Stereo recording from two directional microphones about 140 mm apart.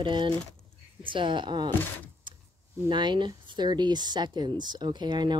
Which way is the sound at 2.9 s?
35° right (ahead or behind).